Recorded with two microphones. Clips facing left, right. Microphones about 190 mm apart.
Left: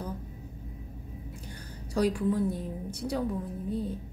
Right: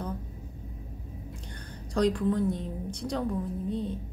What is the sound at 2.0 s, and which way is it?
A woman's voice, 10° left (ahead or behind).